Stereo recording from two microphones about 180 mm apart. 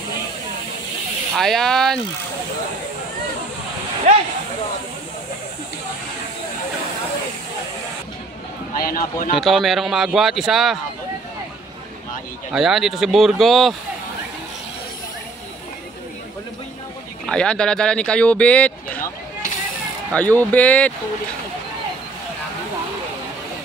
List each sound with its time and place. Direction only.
1.3 s speech: centre (ahead or behind)
8.7 s a man's voice: 55° left (ahead or behind)
9.4 s speech: centre (ahead or behind)
12.5 s speech: centre (ahead or behind)
17.3 s speech: 5° left (ahead or behind)
20.2 s speech: 10° left (ahead or behind)